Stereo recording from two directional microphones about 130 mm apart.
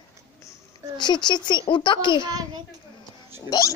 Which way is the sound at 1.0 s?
35° left (ahead or behind).